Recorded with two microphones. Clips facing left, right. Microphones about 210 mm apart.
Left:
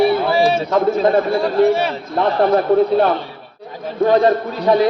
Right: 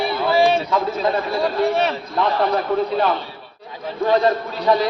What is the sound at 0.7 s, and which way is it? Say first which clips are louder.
A man's voice: left 6 dB; 45° left (ahead or behind).